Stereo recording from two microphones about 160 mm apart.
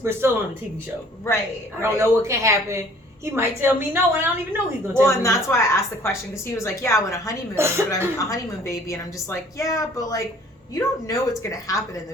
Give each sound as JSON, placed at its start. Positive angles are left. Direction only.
{"t": 0.0, "sound": "a woman's voice", "side_deg": -15}
{"t": 1.8, "sound": "a woman's voice", "side_deg": -15}
{"t": 5.0, "sound": "a woman's voice", "side_deg": 20}
{"t": 7.5, "sound": "a woman's voice", "side_deg": -15}
{"t": 8.3, "sound": "a woman's voice", "side_deg": 20}